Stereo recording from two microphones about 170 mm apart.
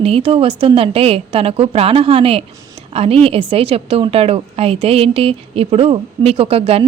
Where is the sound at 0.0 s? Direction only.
35° right (ahead or behind).